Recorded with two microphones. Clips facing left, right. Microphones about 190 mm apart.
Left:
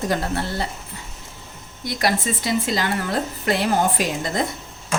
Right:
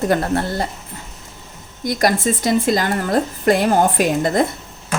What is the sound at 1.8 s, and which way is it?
A woman's voice, 45° right (ahead or behind).